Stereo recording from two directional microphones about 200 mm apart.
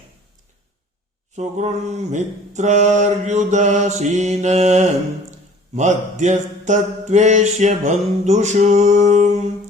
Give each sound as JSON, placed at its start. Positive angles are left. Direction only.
{"t": 1.4, "sound": "speech", "side_deg": -35}